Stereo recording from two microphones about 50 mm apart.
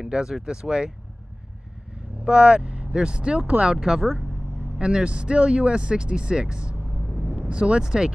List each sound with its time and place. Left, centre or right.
0.0 s speech: centre
2.2 s speech: centre
3.7 s speech: centre
4.7 s speech: centre
7.1 s vehicle: centre
7.3 s speech: right